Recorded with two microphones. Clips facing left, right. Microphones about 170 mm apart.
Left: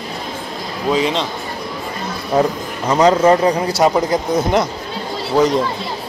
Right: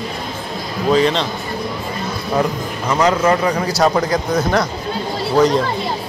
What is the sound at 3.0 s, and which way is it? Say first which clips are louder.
Speech: left 4 dB; 30° left (ahead or behind).